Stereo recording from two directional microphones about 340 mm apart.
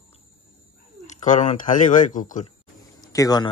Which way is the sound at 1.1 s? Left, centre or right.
Left.